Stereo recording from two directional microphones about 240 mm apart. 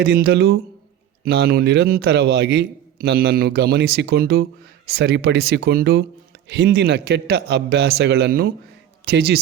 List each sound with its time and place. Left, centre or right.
0.0 s a man's voice: right